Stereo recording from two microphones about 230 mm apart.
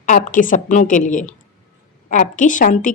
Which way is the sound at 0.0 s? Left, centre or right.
Left.